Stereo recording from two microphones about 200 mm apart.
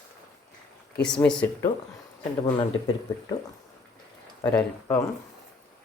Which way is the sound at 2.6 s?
25° left (ahead or behind).